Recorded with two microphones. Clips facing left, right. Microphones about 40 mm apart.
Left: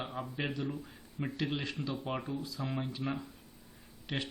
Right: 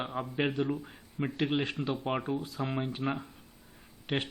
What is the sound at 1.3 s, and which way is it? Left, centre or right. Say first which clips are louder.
Speech: right 6 dB; right.